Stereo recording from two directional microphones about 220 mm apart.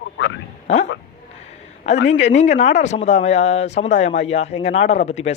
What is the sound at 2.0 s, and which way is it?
Speech, 30° left (ahead or behind).